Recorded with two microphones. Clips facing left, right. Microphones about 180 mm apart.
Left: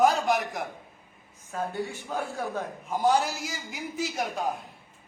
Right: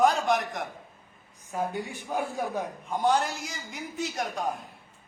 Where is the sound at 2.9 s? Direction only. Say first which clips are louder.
Left 1 dB; centre (ahead or behind).